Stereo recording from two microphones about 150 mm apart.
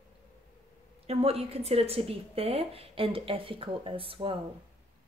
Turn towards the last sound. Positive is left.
turn(degrees=-35)  # may be behind; listen again after turning